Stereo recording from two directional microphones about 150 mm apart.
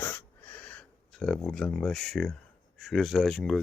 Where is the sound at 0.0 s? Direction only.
15° left (ahead or behind).